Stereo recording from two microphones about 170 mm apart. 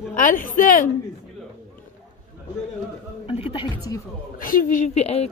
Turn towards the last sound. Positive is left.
turn(degrees=40)  # may be behind; listen again after turning